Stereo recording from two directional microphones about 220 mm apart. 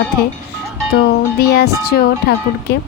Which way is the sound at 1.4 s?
45° left (ahead or behind).